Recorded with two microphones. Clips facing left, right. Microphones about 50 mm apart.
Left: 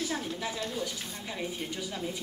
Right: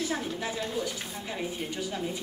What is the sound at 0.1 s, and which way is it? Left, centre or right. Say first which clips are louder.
Speech: right 2 dB; centre.